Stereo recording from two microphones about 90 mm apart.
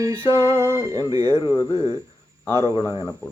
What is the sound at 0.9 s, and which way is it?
Speech, 45° right (ahead or behind).